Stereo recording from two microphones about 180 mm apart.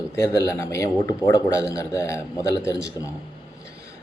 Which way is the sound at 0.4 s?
15° left (ahead or behind).